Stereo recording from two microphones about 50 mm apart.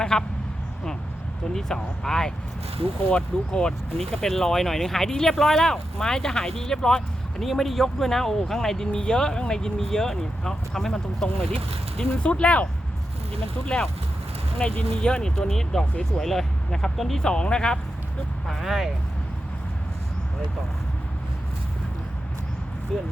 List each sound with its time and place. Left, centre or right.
0.0 s speech: centre
1.5 s speech: centre
7.4 s speech: centre
12.1 s speech: left
13.7 s speech: centre
17.2 s speech: centre
18.4 s speech: centre
22.9 s speech: centre